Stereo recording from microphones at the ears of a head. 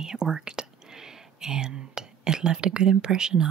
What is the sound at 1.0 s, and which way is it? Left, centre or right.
Speech, right.